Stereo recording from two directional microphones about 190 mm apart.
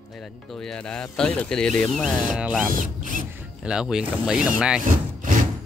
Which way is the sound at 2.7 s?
45° right (ahead or behind).